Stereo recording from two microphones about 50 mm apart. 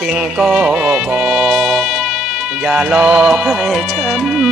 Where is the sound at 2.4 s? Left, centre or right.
Centre.